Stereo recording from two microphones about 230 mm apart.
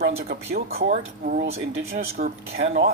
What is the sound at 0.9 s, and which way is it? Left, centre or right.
Speech, right.